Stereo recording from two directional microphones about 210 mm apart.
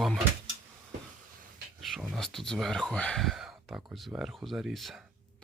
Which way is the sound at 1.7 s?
Centre (ahead or behind).